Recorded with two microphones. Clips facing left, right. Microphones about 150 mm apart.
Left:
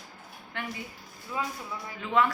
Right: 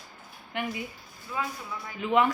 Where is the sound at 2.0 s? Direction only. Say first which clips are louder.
Right 2 dB; 15° right (ahead or behind).